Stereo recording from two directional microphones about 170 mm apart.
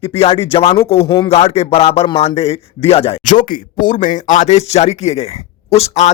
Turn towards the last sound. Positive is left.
turn(degrees=40)  # may be behind; listen again after turning